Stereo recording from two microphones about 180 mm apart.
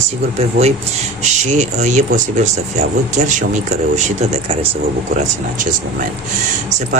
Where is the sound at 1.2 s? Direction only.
40° right (ahead or behind).